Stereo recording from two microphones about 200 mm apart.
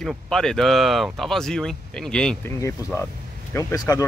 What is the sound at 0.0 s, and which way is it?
Speech, centre (ahead or behind).